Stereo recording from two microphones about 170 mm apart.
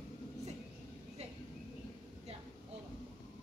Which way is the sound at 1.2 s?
40° right (ahead or behind).